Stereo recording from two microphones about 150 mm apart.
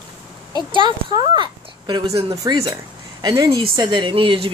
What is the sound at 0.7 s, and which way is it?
Speech, 35° right (ahead or behind).